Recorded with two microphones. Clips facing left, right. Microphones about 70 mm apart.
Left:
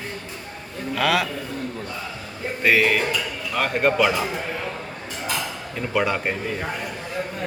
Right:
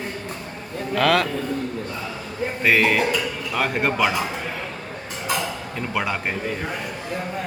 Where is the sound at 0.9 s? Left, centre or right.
Centre.